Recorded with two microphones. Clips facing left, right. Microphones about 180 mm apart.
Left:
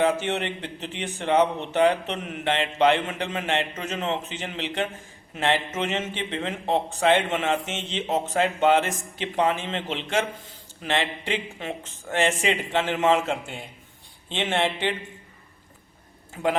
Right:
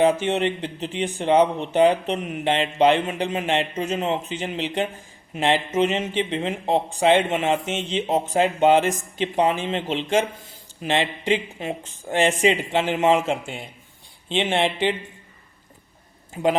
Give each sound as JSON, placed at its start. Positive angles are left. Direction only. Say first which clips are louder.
{"t": 0.0, "sound": "speech", "louder": "right 4 dB", "side_deg": -15}
{"t": 16.3, "sound": "a man's voice", "louder": "right 4 dB", "side_deg": -20}